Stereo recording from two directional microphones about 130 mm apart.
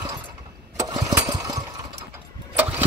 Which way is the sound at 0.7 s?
30° right (ahead or behind).